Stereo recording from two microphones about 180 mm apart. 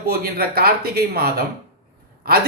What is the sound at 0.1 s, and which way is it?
A man's voice, 60° right (ahead or behind).